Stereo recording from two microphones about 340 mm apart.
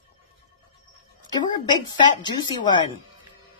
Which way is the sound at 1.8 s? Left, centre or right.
Centre.